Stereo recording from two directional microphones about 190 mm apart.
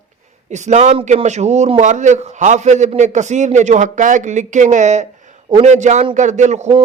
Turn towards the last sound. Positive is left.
turn(degrees=-35)  # may be behind; listen again after turning